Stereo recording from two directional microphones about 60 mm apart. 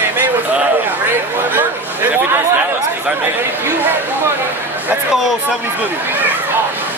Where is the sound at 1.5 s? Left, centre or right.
Right.